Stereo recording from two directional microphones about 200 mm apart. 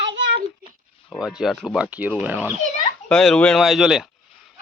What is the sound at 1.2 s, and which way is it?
Speech, 5° right (ahead or behind).